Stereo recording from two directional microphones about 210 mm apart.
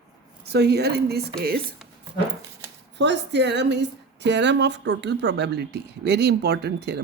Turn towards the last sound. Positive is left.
turn(degrees=-50)  # may be behind; listen again after turning